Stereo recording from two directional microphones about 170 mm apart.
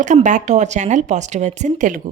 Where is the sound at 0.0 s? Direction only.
45° right (ahead or behind).